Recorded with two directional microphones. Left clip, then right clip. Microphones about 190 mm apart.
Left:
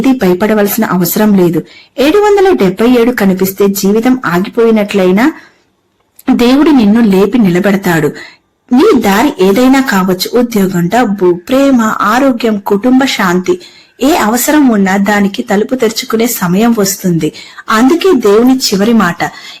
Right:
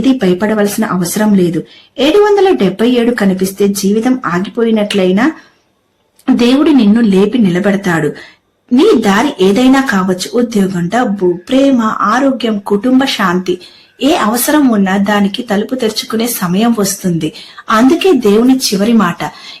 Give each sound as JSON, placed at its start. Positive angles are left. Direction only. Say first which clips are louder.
{"t": 0.0, "sound": "a woman's voice", "louder": "left 2 dB", "side_deg": 20}